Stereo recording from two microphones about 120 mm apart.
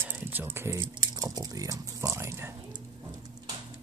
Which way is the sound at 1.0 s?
30° right (ahead or behind).